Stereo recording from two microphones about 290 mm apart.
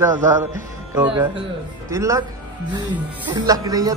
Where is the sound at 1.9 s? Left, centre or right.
Centre.